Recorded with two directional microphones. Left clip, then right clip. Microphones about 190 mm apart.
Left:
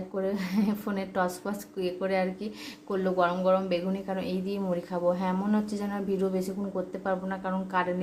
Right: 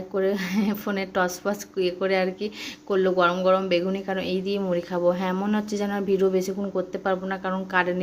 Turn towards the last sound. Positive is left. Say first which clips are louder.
# right 5 dB
turn(degrees=-15)  # may be behind; listen again after turning